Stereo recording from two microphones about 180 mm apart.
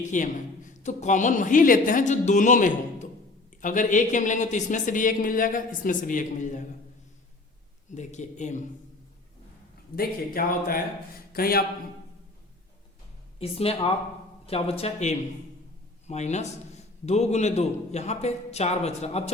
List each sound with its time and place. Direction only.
0.0 s a man's voice: 45° left (ahead or behind)
7.9 s a man's voice: 40° left (ahead or behind)
9.9 s a man's voice: 55° left (ahead or behind)
13.4 s a man's voice: 35° left (ahead or behind)